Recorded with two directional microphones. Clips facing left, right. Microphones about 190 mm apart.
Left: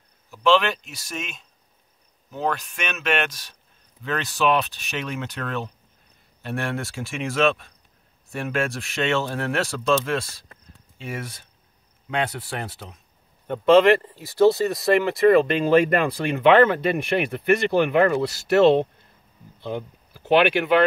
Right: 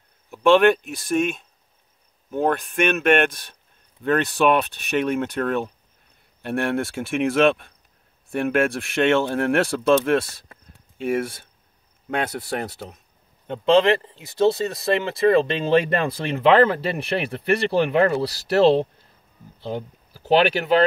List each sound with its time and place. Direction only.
0.3 s speech: 55° right (ahead or behind)
12.1 s speech: 45° right (ahead or behind)
13.5 s speech: 25° right (ahead or behind); by 20.8 s 40° right (ahead or behind)